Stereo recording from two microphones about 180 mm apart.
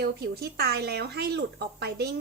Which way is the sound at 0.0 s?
60° right (ahead or behind).